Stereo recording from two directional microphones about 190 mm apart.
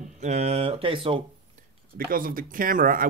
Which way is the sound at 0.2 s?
35° right (ahead or behind).